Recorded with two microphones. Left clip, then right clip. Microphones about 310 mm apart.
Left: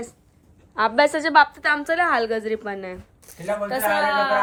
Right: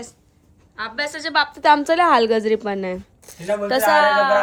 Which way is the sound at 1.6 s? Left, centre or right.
Centre.